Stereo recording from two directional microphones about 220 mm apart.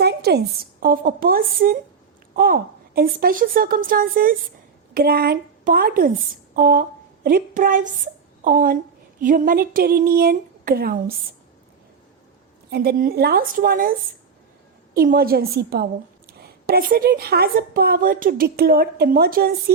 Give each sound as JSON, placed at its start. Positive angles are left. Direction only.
{"t": 0.0, "sound": "a woman's voice", "side_deg": -45}
{"t": 12.7, "sound": "a woman's voice", "side_deg": -45}
{"t": 14.9, "sound": "a woman's voice", "side_deg": -40}